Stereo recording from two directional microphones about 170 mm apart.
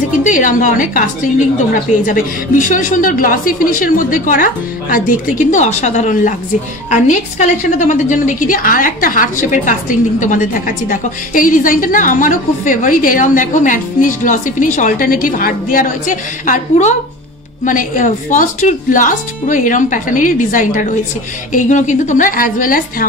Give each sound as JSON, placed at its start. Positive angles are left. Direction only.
{"t": 0.2, "sound": "a woman's voice", "side_deg": 50}